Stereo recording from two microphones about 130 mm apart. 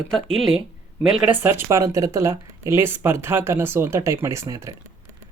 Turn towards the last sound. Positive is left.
turn(degrees=-25)  # may be behind; listen again after turning